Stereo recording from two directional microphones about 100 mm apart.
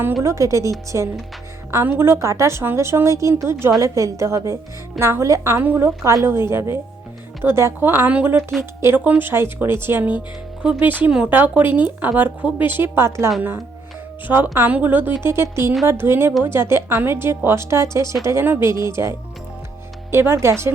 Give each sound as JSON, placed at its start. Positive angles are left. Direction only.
{"t": 0.2, "sound": "a woman's voice", "side_deg": -30}